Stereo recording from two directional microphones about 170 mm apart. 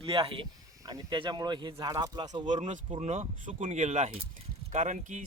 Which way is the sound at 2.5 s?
45° right (ahead or behind).